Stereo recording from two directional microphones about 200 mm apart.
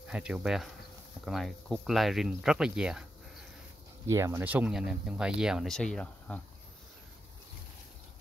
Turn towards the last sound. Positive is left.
turn(degrees=5)  # may be behind; listen again after turning